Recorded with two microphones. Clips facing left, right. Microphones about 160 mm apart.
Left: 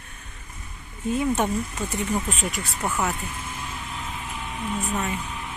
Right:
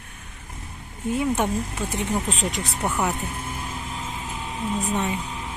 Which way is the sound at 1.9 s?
15° right (ahead or behind).